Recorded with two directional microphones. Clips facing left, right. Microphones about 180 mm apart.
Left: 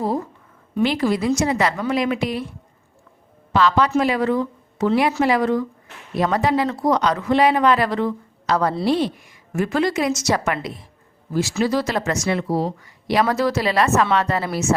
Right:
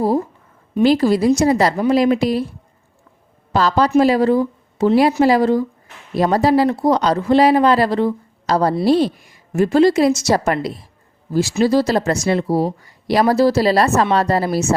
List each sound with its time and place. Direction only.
0.8 s speech: 35° right (ahead or behind)
3.5 s a woman's voice: 40° right (ahead or behind)